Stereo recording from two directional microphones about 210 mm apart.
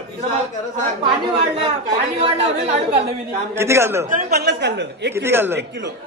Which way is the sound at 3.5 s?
10° right (ahead or behind).